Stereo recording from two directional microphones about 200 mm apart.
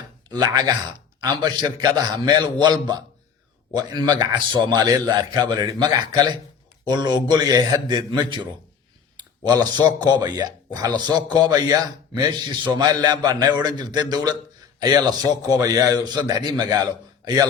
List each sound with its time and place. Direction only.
0.3 s a man's voice: 20° right (ahead or behind)
9.5 s a man's voice: 20° right (ahead or behind)